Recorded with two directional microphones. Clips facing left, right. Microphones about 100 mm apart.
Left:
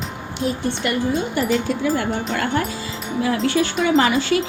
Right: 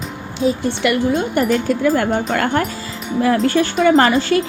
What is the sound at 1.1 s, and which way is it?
Speech, 50° right (ahead or behind).